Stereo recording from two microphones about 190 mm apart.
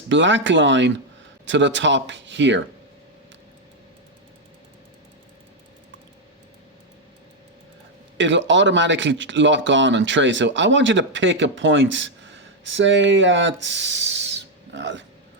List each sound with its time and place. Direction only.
0.1 s speech: 75° right (ahead or behind)
8.2 s speech: 75° right (ahead or behind)